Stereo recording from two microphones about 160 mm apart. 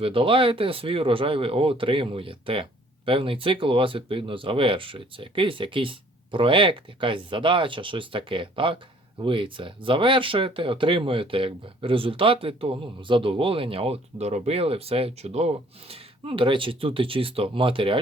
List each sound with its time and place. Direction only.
0.0 s speech: 35° right (ahead or behind)